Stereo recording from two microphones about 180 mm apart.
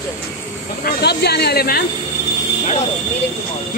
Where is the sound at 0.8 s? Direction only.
65° left (ahead or behind).